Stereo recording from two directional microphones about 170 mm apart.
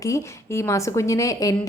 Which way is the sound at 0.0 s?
20° left (ahead or behind).